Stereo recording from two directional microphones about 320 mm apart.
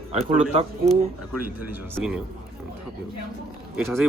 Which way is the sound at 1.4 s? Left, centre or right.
Left.